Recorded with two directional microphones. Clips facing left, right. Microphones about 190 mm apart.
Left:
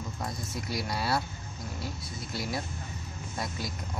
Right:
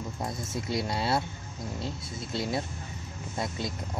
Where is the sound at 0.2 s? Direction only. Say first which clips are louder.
Right 3 dB; 25° right (ahead or behind).